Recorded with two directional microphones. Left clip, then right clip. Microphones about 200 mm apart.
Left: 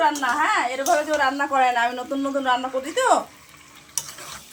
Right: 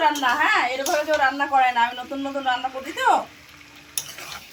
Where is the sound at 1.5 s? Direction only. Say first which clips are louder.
Right 1 dB; 60° left (ahead or behind).